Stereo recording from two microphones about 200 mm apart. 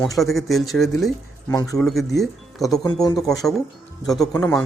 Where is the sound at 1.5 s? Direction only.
15° left (ahead or behind).